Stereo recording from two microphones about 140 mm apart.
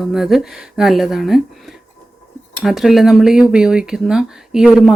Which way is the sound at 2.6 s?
Centre (ahead or behind).